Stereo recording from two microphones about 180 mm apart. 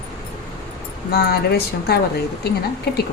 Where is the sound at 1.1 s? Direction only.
60° left (ahead or behind).